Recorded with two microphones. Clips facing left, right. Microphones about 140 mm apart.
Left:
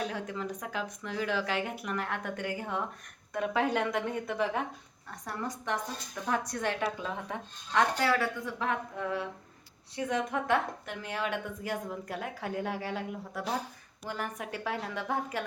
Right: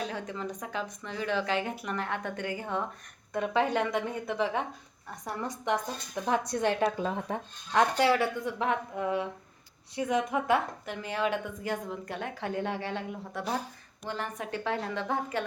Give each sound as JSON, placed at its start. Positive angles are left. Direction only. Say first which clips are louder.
{"t": 0.0, "sound": "a woman's voice", "louder": "even", "side_deg": 5}
{"t": 6.2, "sound": "a woman's voice", "louder": "right 4 dB", "side_deg": -25}
{"t": 10.9, "sound": "a woman's voice", "louder": "right 4 dB", "side_deg": 0}